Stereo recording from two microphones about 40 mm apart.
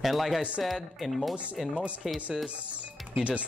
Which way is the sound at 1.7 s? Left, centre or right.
Right.